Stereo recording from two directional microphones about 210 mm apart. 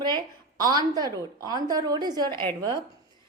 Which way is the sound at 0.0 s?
20° right (ahead or behind).